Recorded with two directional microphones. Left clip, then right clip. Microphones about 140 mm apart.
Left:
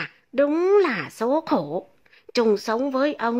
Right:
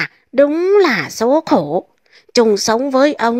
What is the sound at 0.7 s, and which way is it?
A woman's voice, 35° right (ahead or behind).